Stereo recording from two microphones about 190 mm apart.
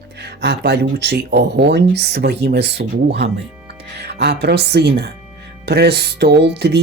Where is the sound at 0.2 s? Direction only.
60° right (ahead or behind).